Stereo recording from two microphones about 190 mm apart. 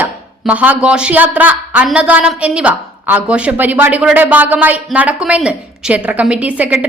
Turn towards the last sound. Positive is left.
turn(degrees=-5)  # may be behind; listen again after turning